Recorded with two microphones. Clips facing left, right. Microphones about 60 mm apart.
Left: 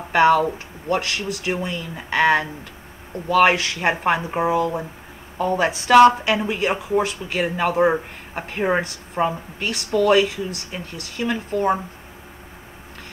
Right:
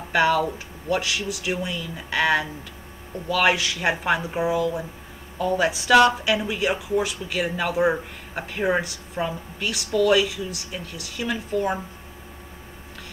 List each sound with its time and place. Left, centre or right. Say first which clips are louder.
0.1 s speech: left 5 dB; left
1.0 s speech: left 2 dB; left
3.5 s speech: left 2 dB; left
7.3 s speech: left 4 dB; left
8.4 s speech: left 2 dB; left
10.7 s speech: left 2 dB; left
11.3 s speech: left 3 dB; left